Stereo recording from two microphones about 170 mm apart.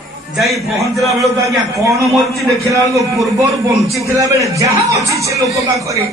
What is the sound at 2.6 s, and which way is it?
A man's voice, 20° right (ahead or behind).